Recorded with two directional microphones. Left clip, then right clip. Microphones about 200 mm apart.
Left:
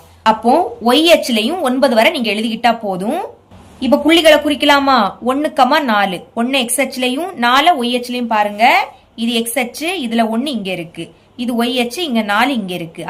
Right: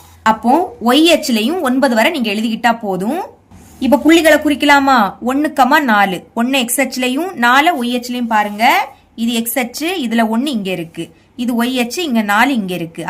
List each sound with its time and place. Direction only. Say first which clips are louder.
0.2 s a woman's voice: left 1 dB; 25° right (ahead or behind)